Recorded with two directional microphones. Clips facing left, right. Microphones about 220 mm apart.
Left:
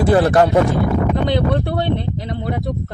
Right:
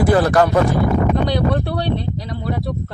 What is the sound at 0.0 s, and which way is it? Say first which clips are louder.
Speech: left 1 dB; 25° left (ahead or behind).